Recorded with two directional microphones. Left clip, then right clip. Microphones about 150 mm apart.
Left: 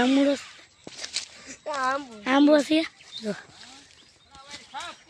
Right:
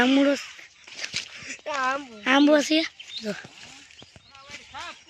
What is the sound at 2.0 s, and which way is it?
Speech, 5° right (ahead or behind).